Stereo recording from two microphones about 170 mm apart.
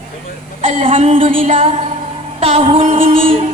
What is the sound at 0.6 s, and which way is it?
Music, 35° right (ahead or behind).